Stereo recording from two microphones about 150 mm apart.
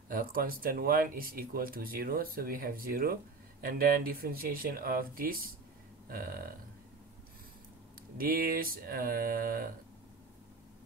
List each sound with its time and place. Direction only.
0.1 s speech: 75° right (ahead or behind)
8.2 s speech: 75° right (ahead or behind)